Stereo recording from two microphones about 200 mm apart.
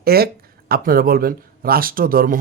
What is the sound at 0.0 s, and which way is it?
Speech, 50° right (ahead or behind).